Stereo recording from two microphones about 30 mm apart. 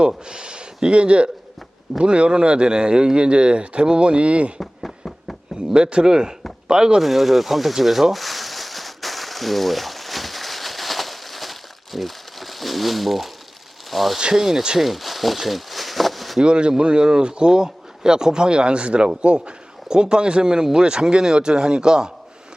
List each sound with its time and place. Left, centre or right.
0.3 s speech: right
4.6 s a sound: centre
5.7 s speech: right
7.0 s speech: centre
8.1 s a sound: centre
13.9 s speech: centre
16.4 s speech: right